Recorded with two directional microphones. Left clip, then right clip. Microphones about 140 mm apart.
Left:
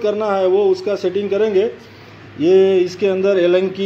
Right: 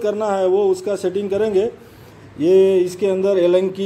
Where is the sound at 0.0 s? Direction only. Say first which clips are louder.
Left 2 dB; 20° right (ahead or behind).